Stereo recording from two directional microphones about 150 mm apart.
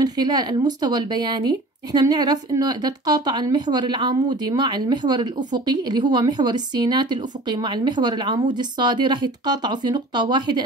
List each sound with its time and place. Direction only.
0.0 s speech: 30° right (ahead or behind)